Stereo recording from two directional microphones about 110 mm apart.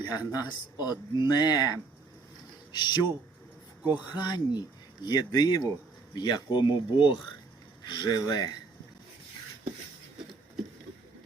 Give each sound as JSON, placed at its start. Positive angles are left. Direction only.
{"t": 0.0, "sound": "speech", "side_deg": 40}
{"t": 3.8, "sound": "speech", "side_deg": -15}
{"t": 4.1, "sound": "speech", "side_deg": 40}